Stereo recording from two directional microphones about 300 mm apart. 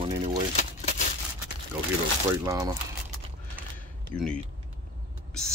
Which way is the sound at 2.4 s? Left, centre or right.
Centre.